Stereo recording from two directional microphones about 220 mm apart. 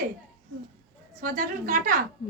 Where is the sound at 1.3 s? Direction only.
40° right (ahead or behind).